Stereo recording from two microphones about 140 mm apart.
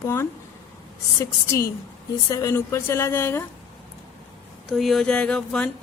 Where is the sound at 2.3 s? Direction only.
25° left (ahead or behind).